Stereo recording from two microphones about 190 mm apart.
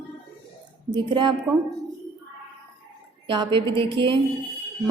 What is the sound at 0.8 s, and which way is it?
Speech, 25° right (ahead or behind).